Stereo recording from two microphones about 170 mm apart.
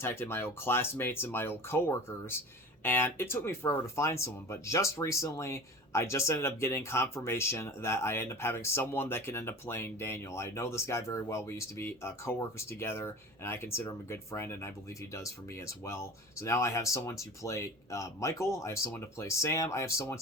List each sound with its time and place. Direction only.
0.0 s speech: 15° left (ahead or behind)